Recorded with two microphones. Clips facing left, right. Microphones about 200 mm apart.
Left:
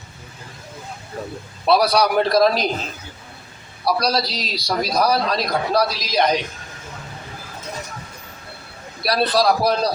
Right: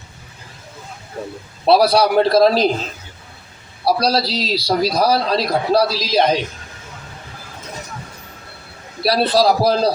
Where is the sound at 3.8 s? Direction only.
30° right (ahead or behind).